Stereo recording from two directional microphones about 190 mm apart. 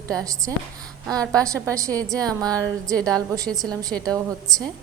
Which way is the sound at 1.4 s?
15° right (ahead or behind).